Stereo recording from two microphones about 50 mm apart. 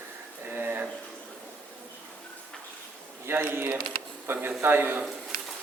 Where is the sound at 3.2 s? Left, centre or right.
Right.